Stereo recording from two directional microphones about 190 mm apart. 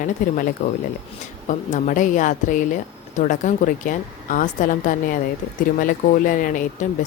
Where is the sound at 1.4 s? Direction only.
40° left (ahead or behind).